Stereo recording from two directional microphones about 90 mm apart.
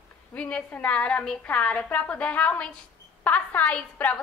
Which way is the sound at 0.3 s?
15° left (ahead or behind).